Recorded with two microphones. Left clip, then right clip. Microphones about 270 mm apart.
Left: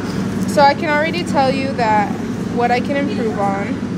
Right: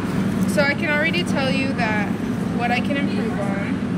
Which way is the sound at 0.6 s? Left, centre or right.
Left.